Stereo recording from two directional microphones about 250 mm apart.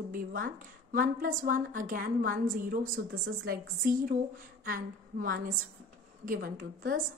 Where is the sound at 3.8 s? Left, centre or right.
Right.